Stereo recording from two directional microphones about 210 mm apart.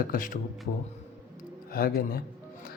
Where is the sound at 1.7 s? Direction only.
45° left (ahead or behind).